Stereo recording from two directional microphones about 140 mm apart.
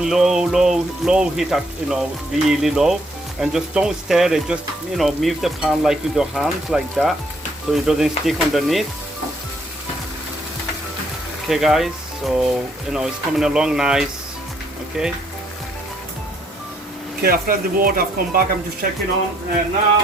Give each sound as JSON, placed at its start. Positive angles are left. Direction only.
{"t": 0.0, "sound": "speech", "side_deg": -5}
{"t": 11.4, "sound": "speech", "side_deg": 0}
{"t": 17.2, "sound": "speech", "side_deg": -90}